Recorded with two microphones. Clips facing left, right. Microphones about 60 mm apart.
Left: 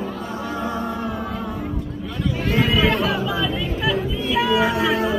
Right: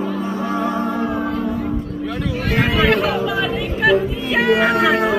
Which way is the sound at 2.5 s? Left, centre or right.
Right.